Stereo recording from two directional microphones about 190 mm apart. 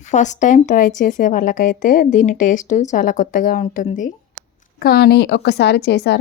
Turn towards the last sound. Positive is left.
turn(degrees=60)  # may be behind; listen again after turning